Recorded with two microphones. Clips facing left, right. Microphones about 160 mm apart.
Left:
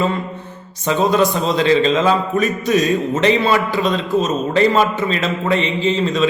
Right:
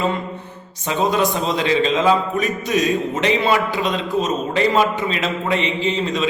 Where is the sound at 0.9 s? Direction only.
15° right (ahead or behind).